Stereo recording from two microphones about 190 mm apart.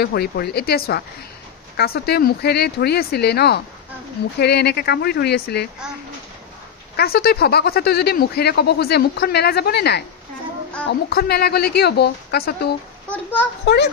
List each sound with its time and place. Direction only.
0.0 s speech: 55° left (ahead or behind)
7.0 s speech: 55° left (ahead or behind)
13.1 s a child's voice: 10° left (ahead or behind)